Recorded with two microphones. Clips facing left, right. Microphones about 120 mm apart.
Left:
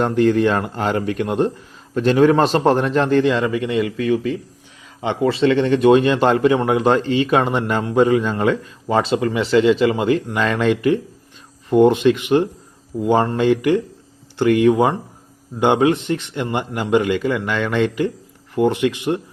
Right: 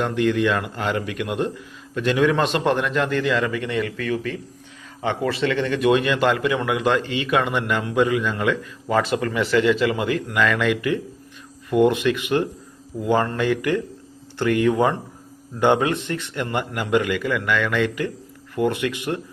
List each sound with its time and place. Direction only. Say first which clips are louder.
0.0 s a man's voice: left 5 dB; 40° left (ahead or behind)